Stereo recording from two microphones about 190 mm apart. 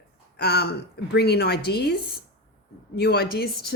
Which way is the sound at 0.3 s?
60° left (ahead or behind).